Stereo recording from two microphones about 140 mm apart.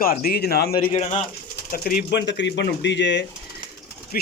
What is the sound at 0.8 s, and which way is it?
Speech, 45° left (ahead or behind).